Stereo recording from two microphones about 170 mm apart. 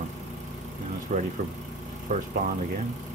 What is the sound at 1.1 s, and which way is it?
Speech, 45° right (ahead or behind).